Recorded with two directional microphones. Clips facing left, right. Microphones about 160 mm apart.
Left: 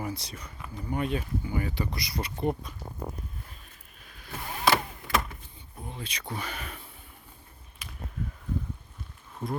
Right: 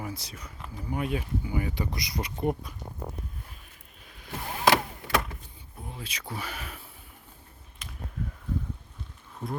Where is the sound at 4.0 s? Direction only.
20° right (ahead or behind).